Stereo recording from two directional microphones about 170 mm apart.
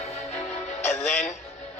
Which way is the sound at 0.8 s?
45° left (ahead or behind).